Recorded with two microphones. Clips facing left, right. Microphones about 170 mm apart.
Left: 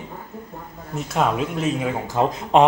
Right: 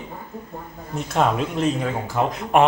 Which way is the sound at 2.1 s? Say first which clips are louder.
Left 2 dB; 20° left (ahead or behind).